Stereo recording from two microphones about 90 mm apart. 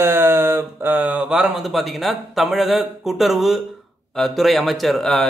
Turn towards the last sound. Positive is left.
turn(degrees=5)  # may be behind; listen again after turning